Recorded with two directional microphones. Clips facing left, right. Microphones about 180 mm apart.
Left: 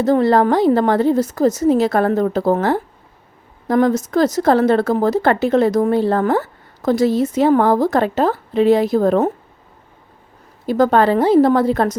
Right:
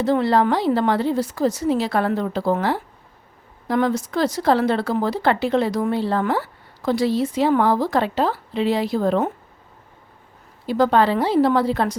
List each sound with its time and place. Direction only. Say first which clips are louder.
0.0 s speech: left 4 dB; 45° left (ahead or behind)
10.7 s speech: left 3 dB; 45° left (ahead or behind)